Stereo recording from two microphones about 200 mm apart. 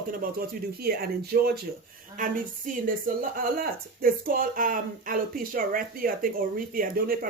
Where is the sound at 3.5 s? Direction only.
45° right (ahead or behind).